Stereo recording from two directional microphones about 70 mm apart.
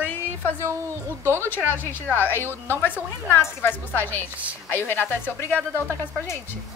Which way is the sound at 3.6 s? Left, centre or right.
Left.